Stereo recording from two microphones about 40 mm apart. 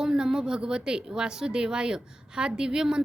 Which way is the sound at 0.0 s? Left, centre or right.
Centre.